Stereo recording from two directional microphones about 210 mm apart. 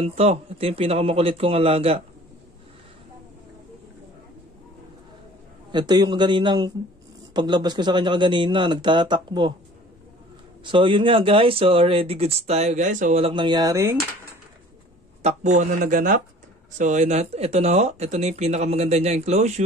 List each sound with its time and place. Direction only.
0.0 s speech: 30° right (ahead or behind)
5.7 s speech: 20° right (ahead or behind)
10.6 s speech: 25° right (ahead or behind)
15.2 s speech: 35° right (ahead or behind)